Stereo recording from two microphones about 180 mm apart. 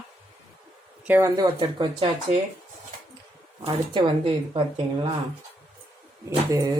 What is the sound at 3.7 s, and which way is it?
Speech, 30° right (ahead or behind).